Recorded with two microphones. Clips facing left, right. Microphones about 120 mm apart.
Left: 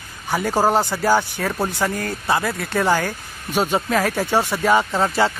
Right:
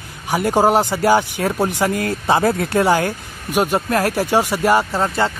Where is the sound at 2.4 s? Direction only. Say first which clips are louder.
Right 7 dB; 25° right (ahead or behind).